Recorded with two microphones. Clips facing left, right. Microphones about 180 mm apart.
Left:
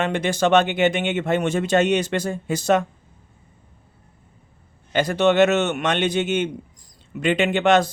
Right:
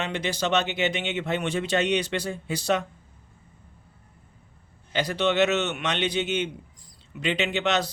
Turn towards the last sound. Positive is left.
turn(degrees=50)  # may be behind; listen again after turning